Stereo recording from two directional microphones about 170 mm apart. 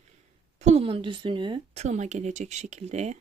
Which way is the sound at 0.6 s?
40° right (ahead or behind).